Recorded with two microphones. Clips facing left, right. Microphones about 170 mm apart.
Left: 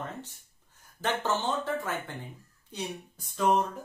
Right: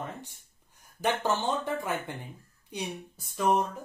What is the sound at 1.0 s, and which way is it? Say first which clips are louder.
Speech: right 1 dB; 15° right (ahead or behind).